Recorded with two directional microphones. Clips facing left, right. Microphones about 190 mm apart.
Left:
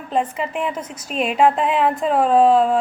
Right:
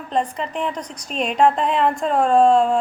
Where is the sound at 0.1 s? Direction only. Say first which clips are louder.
Left 1 dB; 5° left (ahead or behind).